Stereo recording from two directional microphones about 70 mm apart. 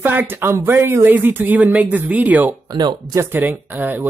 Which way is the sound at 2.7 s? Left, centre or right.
Right.